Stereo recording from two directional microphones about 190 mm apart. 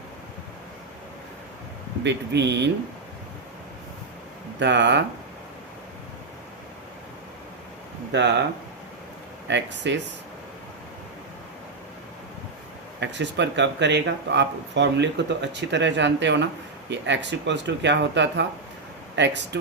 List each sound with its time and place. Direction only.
2.0 s speech: 65° right (ahead or behind)
4.6 s speech: 65° right (ahead or behind)
8.1 s speech: 65° right (ahead or behind)
9.5 s speech: 70° right (ahead or behind)
13.0 s speech: 65° right (ahead or behind)